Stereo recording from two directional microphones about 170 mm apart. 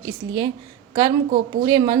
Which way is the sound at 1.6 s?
30° right (ahead or behind).